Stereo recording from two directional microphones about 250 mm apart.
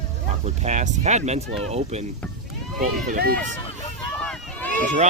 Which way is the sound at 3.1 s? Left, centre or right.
Right.